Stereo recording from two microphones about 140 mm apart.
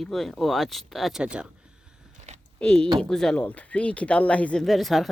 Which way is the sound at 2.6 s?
10° left (ahead or behind).